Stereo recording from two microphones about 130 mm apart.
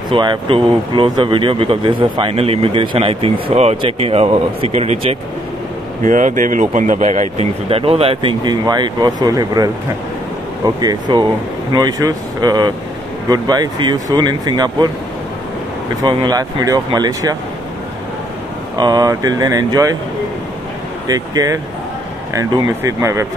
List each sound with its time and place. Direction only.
0.1 s speech: 40° right (ahead or behind)
6.0 s speech: 75° right (ahead or behind); by 14.9 s 30° right (ahead or behind)
16.0 s speech: 35° right (ahead or behind)
18.8 s speech: 30° right (ahead or behind)
21.1 s speech: 25° right (ahead or behind)